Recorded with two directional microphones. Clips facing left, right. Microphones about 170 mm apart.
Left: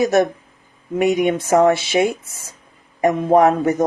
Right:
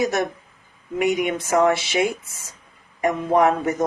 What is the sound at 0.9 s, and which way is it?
Speech, 30° left (ahead or behind).